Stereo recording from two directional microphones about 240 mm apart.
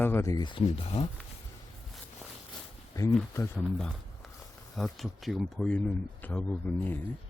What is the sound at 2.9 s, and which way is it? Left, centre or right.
Speech, centre.